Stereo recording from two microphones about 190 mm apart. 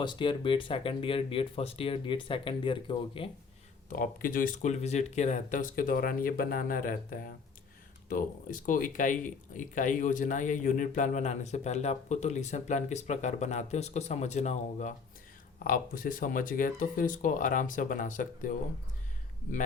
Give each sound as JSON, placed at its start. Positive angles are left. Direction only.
{"t": 0.0, "sound": "speech", "side_deg": 25}
{"t": 3.8, "sound": "speech", "side_deg": 45}